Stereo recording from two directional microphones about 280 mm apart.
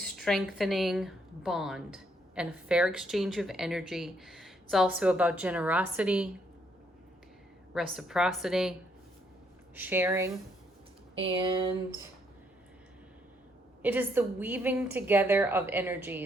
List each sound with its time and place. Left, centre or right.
0.0 s a woman's voice: centre
7.7 s a woman's voice: centre
9.7 s a woman's voice: centre
13.8 s a woman's voice: centre